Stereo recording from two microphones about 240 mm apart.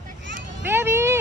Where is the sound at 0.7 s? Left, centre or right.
Centre.